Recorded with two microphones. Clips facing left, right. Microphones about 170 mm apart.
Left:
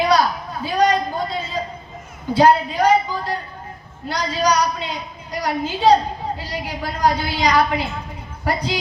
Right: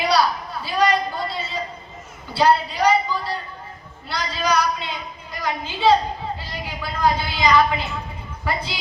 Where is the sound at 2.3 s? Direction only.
45° left (ahead or behind).